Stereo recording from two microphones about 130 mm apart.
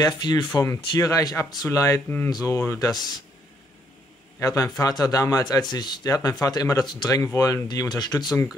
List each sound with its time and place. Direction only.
0.0 s speech: 30° left (ahead or behind)
4.4 s a man's voice: 25° left (ahead or behind)